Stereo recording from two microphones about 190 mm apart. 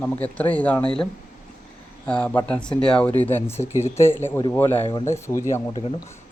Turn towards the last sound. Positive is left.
turn(degrees=15)  # may be behind; listen again after turning